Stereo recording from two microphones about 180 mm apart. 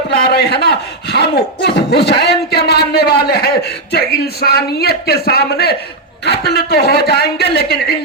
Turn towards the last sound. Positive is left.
turn(degrees=60)  # may be behind; listen again after turning